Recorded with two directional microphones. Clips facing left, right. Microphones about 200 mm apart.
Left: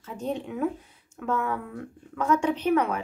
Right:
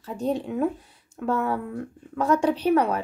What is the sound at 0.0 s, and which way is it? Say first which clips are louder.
A woman's voice: right 5 dB; 35° right (ahead or behind).